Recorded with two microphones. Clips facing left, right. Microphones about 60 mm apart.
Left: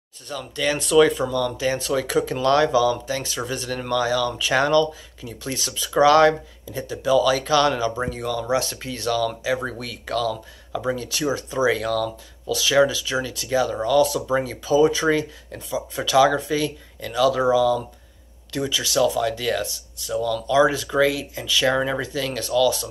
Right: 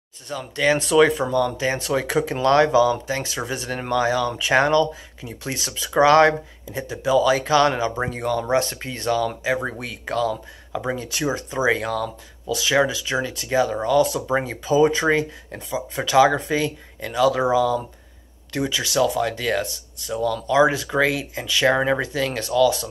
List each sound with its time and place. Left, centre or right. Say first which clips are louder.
0.3 s speech: right 4 dB; right